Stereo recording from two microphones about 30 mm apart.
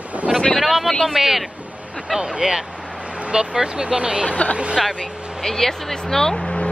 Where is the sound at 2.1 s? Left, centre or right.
Right.